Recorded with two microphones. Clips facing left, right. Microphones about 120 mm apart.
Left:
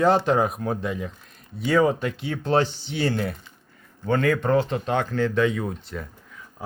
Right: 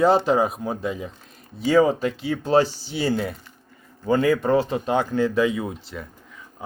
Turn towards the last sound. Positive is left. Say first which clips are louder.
# even
turn(degrees=0)  # may be behind; listen again after turning